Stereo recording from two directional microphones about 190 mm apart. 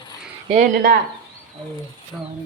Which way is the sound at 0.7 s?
50° right (ahead or behind).